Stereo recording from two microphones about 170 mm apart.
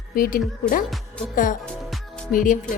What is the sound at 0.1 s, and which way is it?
Speech, 55° left (ahead or behind).